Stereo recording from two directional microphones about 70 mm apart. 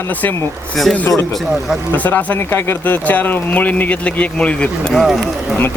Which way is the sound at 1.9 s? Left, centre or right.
Left.